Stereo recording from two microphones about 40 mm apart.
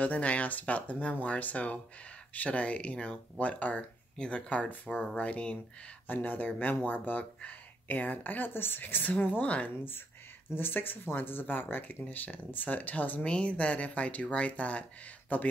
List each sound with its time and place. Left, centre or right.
0.0 s speech: left
6.0 s speech: left
8.5 s speech: left
9.4 s speech: left
10.5 s speech: left
13.2 s speech: left